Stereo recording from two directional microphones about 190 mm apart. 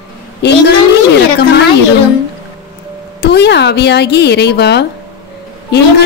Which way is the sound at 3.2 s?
60° left (ahead or behind).